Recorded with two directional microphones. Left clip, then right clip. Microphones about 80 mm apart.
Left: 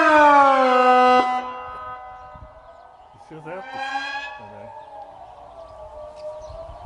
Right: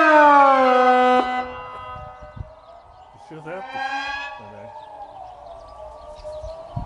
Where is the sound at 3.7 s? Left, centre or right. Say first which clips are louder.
Right 1 dB; centre.